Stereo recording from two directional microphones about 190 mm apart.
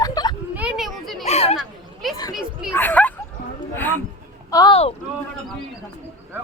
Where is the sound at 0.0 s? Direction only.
20° left (ahead or behind).